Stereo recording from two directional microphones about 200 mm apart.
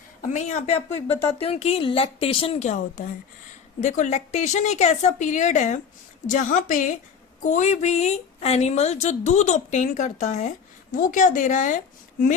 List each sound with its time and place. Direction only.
0.2 s a woman's voice: 35° left (ahead or behind)